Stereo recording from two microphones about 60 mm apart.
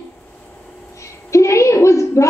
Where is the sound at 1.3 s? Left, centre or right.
Left.